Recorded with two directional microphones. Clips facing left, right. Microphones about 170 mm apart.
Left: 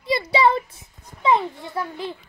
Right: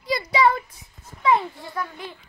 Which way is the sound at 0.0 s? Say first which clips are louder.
Left 1 dB; 25° left (ahead or behind).